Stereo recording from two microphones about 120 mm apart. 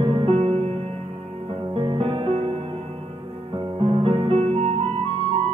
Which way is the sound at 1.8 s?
50° right (ahead or behind).